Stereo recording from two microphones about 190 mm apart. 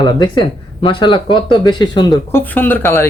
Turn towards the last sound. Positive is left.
turn(degrees=10)  # may be behind; listen again after turning